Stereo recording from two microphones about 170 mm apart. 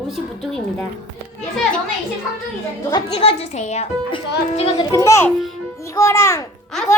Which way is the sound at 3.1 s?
35° left (ahead or behind).